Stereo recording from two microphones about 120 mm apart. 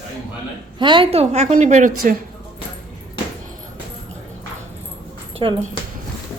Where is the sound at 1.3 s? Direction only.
80° right.